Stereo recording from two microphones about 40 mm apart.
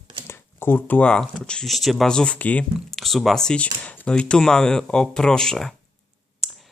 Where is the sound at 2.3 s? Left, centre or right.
Left.